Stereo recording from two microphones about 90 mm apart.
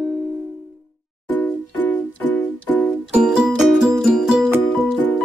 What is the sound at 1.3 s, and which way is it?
Music, 20° left (ahead or behind).